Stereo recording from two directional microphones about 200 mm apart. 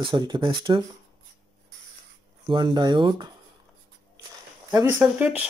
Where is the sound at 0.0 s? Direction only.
25° right (ahead or behind).